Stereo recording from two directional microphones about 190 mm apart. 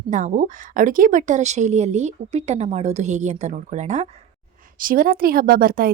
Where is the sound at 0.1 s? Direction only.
40° right (ahead or behind).